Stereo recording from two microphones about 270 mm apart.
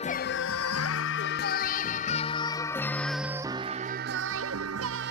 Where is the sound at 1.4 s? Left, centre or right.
Left.